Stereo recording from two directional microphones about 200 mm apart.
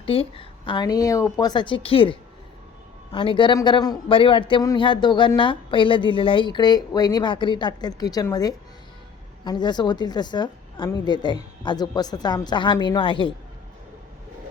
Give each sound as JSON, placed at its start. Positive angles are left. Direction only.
{"t": 0.0, "sound": "a man's voice", "side_deg": 30}